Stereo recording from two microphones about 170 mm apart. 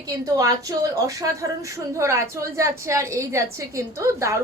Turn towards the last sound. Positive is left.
turn(degrees=-15)  # may be behind; listen again after turning